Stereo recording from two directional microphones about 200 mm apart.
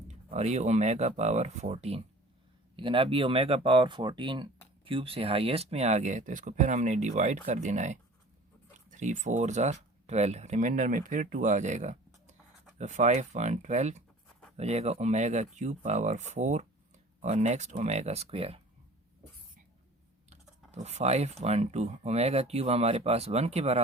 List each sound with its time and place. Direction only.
0.1 s speech: 35° right (ahead or behind)
20.7 s speech: 35° right (ahead or behind)